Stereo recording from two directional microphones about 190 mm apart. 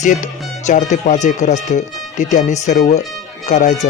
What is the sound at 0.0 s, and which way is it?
Speech, 40° left (ahead or behind).